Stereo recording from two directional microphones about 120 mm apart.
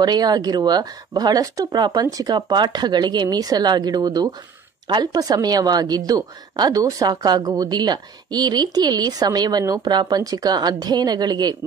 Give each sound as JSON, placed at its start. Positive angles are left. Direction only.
{"t": 0.0, "sound": "a woman's voice", "side_deg": -35}